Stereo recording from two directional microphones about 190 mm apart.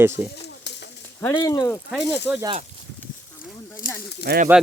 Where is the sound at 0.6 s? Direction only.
65° left (ahead or behind).